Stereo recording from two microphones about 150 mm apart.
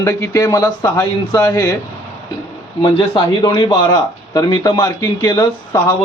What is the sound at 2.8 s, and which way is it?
Speech, 30° left (ahead or behind).